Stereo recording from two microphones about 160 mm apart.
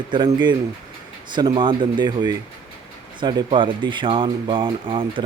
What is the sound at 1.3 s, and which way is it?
Speech, 25° right (ahead or behind).